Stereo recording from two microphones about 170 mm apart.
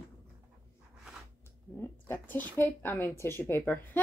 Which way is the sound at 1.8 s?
10° left (ahead or behind).